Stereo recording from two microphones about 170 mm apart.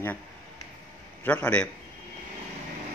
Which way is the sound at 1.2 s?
10° left (ahead or behind).